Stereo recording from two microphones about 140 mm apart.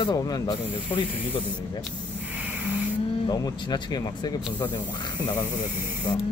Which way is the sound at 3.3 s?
30° left (ahead or behind).